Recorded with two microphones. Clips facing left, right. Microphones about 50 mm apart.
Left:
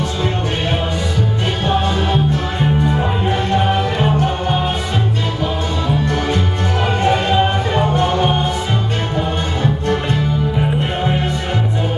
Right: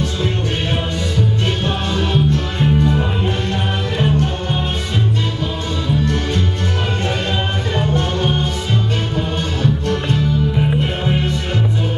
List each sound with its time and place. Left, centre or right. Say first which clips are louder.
1.7 s music: left 3 dB; centre
5.9 s music: left 1 dB; centre
9.6 s music: left 1 dB; centre